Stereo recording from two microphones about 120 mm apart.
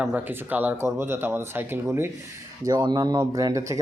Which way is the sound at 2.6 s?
35° right (ahead or behind).